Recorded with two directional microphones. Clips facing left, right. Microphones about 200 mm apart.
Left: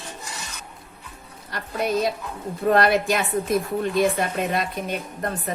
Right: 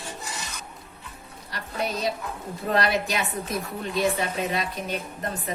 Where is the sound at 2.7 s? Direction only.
50° left (ahead or behind).